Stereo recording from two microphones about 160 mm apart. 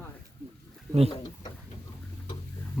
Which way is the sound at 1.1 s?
25° left (ahead or behind).